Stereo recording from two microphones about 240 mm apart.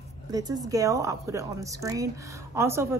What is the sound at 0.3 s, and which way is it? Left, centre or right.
Speech, centre.